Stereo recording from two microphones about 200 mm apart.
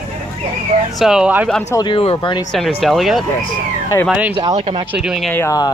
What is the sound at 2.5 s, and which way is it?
Speech, centre (ahead or behind).